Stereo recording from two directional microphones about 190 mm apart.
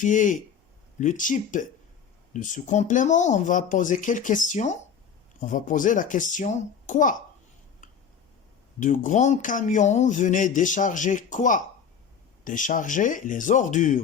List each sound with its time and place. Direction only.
0.0 s speech: 40° left (ahead or behind)
8.8 s speech: 40° left (ahead or behind)